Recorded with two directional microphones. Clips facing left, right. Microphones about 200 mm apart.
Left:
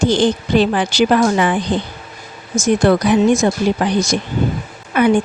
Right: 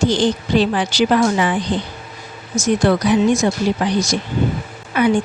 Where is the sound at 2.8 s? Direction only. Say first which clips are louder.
Left 2 dB; 55° left (ahead or behind).